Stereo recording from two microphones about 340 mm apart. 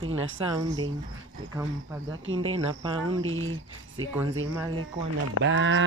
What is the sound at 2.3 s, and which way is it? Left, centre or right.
Speech, centre.